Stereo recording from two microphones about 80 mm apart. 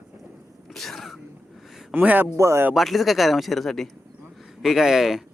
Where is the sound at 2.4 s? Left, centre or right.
Right.